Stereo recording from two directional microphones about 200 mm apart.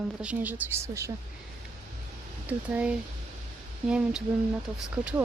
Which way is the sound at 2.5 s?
5° right (ahead or behind).